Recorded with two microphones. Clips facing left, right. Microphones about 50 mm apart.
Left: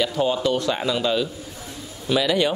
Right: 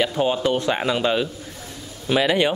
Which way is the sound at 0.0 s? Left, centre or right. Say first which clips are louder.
Right 1 dB; right.